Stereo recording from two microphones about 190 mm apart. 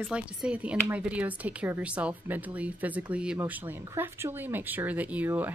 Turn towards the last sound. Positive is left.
turn(degrees=-10)  # may be behind; listen again after turning